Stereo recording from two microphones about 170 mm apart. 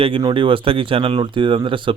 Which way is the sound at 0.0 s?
30° right (ahead or behind).